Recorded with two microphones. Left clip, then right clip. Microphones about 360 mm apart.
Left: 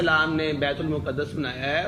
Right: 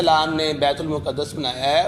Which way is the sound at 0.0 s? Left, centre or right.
Centre.